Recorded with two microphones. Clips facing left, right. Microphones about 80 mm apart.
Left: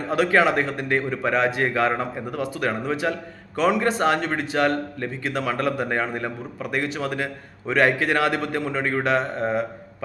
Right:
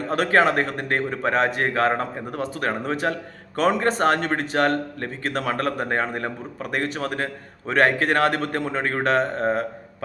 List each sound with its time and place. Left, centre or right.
0.1 s a man's voice: right